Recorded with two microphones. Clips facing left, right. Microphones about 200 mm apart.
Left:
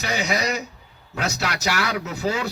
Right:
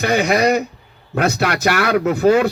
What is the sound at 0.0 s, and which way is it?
A man's voice, 55° right (ahead or behind).